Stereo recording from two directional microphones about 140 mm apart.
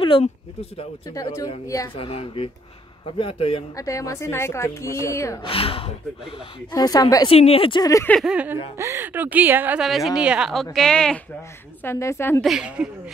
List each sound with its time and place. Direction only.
0.2 s speech: 45° left (ahead or behind)
1.1 s a woman's voice: 25° left (ahead or behind)
2.0 s speech: 40° left (ahead or behind)
3.7 s a woman's voice: 25° left (ahead or behind)
5.4 s speech: 40° left (ahead or behind)
6.7 s a woman's voice: 30° left (ahead or behind)
7.2 s speech: 45° left (ahead or behind)
7.8 s a woman's voice: 20° left (ahead or behind)
8.3 s a woman's voice: 10° right (ahead or behind)
9.8 s a woman's voice: centre (ahead or behind)
11.8 s a woman's voice: 20° left (ahead or behind)
12.4 s a woman's voice: 5° right (ahead or behind)